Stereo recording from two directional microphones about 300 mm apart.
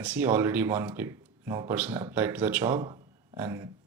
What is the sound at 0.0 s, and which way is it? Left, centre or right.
Speech, centre.